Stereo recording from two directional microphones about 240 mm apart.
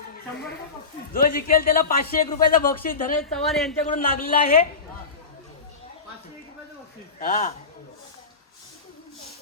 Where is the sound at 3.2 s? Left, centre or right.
Centre.